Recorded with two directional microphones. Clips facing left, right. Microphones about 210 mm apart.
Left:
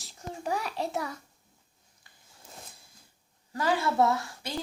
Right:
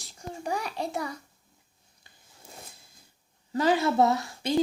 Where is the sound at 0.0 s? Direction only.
Centre (ahead or behind).